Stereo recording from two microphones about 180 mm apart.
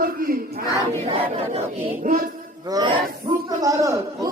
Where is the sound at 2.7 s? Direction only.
25° right (ahead or behind).